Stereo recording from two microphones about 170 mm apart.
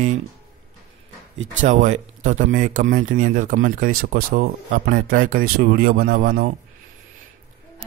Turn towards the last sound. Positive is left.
turn(degrees=-60)  # may be behind; listen again after turning